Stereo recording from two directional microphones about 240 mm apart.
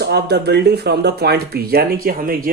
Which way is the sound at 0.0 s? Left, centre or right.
Right.